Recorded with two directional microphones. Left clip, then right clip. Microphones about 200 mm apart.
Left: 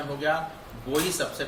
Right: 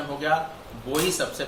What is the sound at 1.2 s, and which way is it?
Speech, 30° right (ahead or behind).